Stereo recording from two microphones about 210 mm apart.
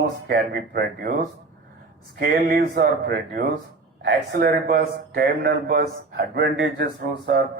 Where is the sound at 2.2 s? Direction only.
50° right (ahead or behind).